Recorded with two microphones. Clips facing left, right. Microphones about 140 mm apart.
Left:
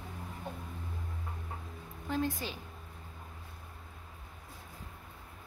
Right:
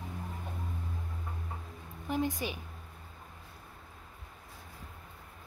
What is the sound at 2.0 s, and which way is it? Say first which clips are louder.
Speech: right 1 dB; 15° right (ahead or behind).